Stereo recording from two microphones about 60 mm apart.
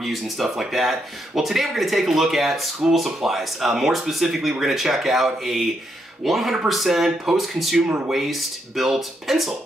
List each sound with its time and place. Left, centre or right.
0.0 s speech: centre